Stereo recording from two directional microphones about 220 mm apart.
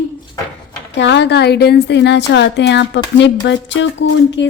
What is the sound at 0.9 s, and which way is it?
A woman's voice, 55° left (ahead or behind).